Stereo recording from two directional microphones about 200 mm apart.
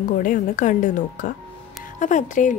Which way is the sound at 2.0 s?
40° left (ahead or behind).